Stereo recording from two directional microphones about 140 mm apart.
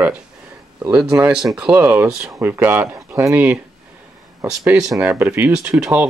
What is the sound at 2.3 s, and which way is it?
Speech, 20° right (ahead or behind).